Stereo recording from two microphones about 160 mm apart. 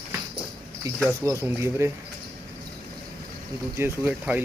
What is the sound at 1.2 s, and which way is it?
Speech, 15° right (ahead or behind).